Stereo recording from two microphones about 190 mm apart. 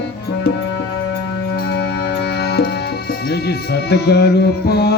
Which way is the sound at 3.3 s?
60° left (ahead or behind).